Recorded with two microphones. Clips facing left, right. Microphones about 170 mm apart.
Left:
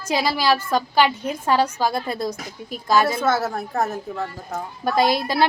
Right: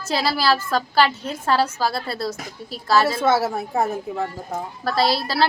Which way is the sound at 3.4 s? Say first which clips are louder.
Right 2 dB; 10° right (ahead or behind).